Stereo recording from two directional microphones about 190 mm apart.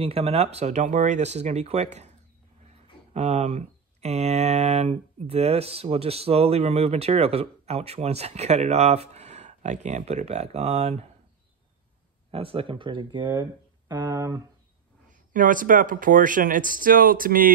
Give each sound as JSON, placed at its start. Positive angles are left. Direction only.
{"t": 0.0, "sound": "speech", "side_deg": -30}
{"t": 12.3, "sound": "speech", "side_deg": -30}
{"t": 15.0, "sound": "speech", "side_deg": -45}